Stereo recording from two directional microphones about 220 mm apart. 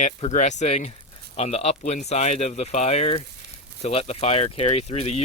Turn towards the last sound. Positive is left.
turn(degrees=30)  # may be behind; listen again after turning